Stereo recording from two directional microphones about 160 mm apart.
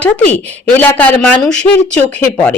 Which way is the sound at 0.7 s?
10° left (ahead or behind).